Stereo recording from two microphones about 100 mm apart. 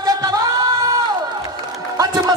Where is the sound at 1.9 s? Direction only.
40° right (ahead or behind).